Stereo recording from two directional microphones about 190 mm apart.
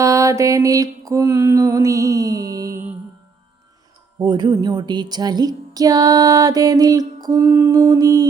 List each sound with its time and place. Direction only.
0.0 s mantra: 15° right (ahead or behind)
4.2 s speech: 20° right (ahead or behind)